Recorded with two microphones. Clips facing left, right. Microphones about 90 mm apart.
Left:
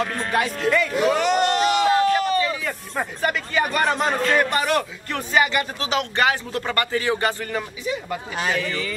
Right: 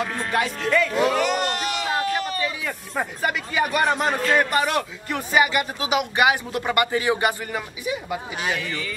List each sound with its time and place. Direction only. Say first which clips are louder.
0.0 s speech: left 1 dB; centre (ahead or behind)
1.1 s a sound: left 3 dB; 25° left (ahead or behind)
2.1 s a man's voice: left 5 dB; 5° right (ahead or behind)